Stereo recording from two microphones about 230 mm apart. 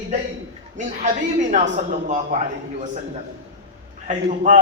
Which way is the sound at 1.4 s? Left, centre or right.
Right.